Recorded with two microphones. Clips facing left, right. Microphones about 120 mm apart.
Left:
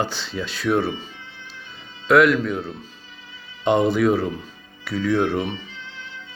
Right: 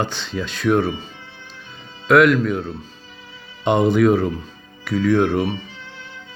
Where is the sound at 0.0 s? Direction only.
5° left (ahead or behind).